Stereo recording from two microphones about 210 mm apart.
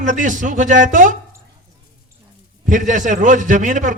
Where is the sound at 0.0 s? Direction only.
35° right (ahead or behind).